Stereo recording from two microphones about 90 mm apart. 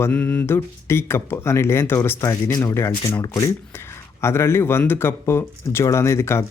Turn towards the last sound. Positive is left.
turn(degrees=30)  # may be behind; listen again after turning